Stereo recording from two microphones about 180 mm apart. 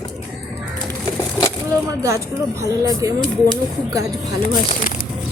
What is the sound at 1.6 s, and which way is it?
Speech, 15° right (ahead or behind).